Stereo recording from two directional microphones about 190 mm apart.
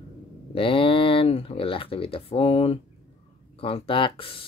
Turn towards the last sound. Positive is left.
turn(degrees=30)  # may be behind; listen again after turning